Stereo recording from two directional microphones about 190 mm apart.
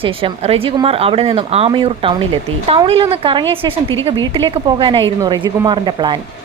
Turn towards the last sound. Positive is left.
turn(degrees=-25)  # may be behind; listen again after turning